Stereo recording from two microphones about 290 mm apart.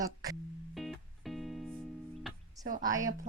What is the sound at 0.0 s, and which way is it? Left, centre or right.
Speech, centre.